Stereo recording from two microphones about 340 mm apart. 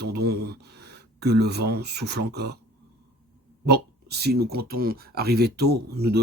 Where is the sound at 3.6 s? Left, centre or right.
Right.